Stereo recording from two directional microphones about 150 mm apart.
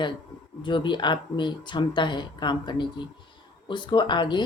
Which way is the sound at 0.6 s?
30° left (ahead or behind).